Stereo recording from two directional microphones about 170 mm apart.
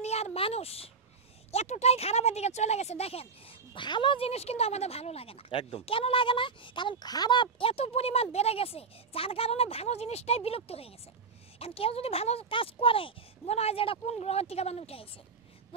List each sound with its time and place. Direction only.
0.0 s speech: 40° left (ahead or behind)